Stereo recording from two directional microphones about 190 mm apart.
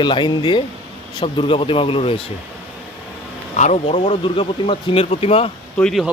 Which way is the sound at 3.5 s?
40° left (ahead or behind).